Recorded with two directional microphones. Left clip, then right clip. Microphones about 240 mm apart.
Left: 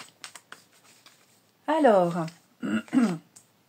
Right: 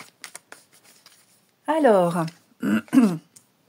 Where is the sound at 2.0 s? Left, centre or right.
Right.